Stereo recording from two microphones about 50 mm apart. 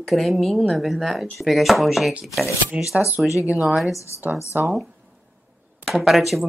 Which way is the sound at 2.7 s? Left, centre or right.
Right.